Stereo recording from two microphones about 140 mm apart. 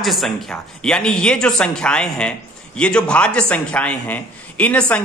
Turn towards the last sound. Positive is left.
turn(degrees=10)  # may be behind; listen again after turning